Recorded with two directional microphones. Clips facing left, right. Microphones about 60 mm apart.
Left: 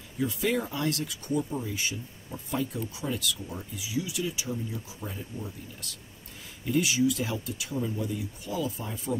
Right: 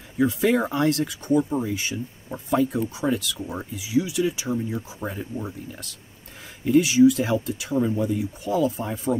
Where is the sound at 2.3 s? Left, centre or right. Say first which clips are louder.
Right 9 dB; right.